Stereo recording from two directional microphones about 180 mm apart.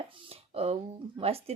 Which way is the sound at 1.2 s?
35° right (ahead or behind).